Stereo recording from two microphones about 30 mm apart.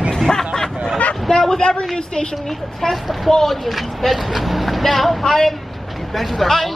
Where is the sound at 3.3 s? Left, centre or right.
Centre.